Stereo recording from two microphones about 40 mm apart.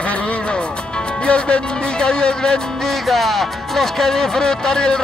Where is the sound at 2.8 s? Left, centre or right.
Centre.